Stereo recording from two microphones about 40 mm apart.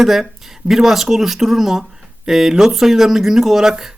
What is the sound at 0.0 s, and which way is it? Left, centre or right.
A man's voice, centre.